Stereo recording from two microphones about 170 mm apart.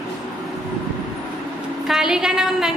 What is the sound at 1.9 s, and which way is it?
Speech, 5° right (ahead or behind).